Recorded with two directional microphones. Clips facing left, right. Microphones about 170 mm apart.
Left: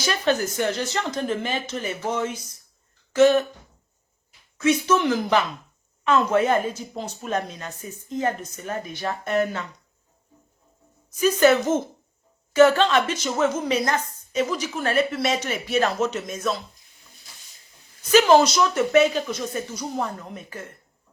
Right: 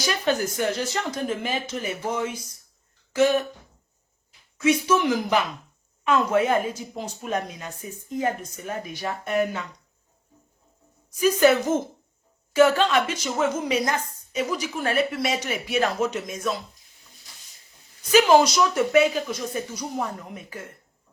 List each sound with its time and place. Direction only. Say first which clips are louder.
0.3 s a woman's voice: left 2 dB; 10° right (ahead or behind)
4.5 s a woman's voice: left 1 dB; 10° right (ahead or behind)
11.2 s a woman's voice: left 1 dB; 10° right (ahead or behind)
18.1 s a woman's voice: left 1 dB; 10° right (ahead or behind)